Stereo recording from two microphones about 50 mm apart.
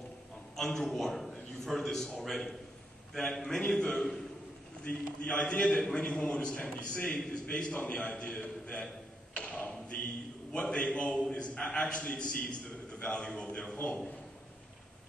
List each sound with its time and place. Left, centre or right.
0.6 s a man's voice: centre
4.8 s a man's voice: left
9.4 s thump: centre
10.5 s a man's voice: left